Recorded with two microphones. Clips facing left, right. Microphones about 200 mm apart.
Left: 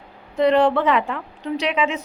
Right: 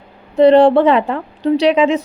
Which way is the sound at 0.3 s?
30° right (ahead or behind).